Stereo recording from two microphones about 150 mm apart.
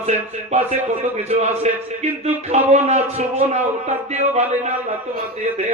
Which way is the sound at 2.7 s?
50° right (ahead or behind).